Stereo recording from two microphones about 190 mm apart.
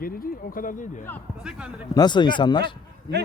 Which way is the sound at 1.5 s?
5° right (ahead or behind).